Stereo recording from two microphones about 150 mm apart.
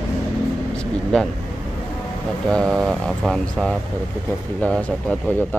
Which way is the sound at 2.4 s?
Centre (ahead or behind).